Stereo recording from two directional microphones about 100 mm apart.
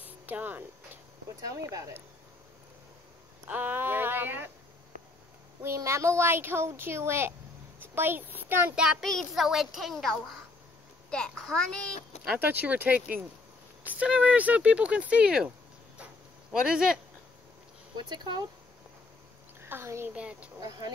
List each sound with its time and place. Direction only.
0.0 s a sound: 15° right (ahead or behind)
1.4 s speech: 35° right (ahead or behind)
3.4 s speech: 20° right (ahead or behind)
5.8 s speech: 30° right (ahead or behind); by 8.9 s 10° right (ahead or behind)
9.0 s a child's voice: centre (ahead or behind)
12.4 s speech: 15° right (ahead or behind)
16.6 s speech: 5° right (ahead or behind)
17.9 s speech: 45° right (ahead or behind)
19.6 s a child's voice: 25° right (ahead or behind)
20.2 s speech: 10° right (ahead or behind)